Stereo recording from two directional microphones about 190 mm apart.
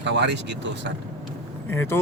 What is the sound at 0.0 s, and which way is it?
Speech, 65° right (ahead or behind).